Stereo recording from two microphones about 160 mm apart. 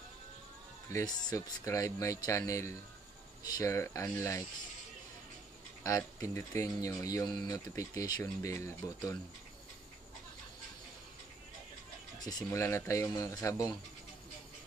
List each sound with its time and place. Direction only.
0.8 s speech: 20° left (ahead or behind)
6.2 s speech: 20° left (ahead or behind)
12.2 s speech: 25° left (ahead or behind)